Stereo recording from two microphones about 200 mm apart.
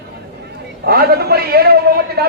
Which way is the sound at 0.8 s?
50° right (ahead or behind).